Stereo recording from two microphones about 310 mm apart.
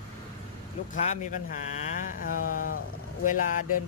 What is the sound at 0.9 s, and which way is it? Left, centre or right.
Speech, left.